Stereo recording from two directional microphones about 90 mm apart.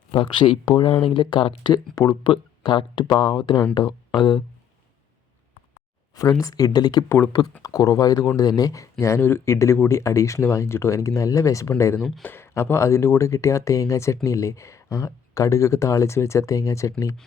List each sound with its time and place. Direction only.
0.1 s speech: 65° left (ahead or behind)
1.7 s speech: 50° left (ahead or behind)
6.1 s speech: 40° left (ahead or behind)
12.2 s speech: 25° left (ahead or behind)